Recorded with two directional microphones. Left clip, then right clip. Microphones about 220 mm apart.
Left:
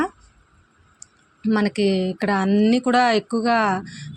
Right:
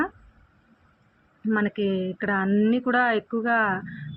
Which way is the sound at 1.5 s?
45° left (ahead or behind).